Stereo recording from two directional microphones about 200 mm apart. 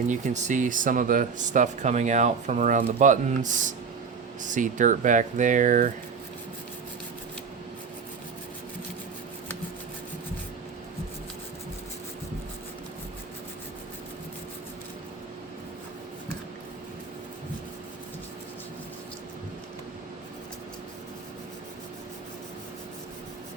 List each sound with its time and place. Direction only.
0.1 s speech: 40° right (ahead or behind)